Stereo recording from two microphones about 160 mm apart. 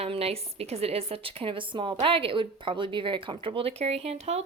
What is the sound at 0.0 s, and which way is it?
A woman's voice, 40° right (ahead or behind).